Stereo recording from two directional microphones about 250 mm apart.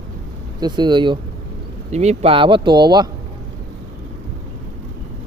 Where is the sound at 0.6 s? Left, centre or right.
Centre.